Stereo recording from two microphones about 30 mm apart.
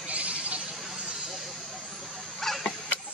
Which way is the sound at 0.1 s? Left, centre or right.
Right.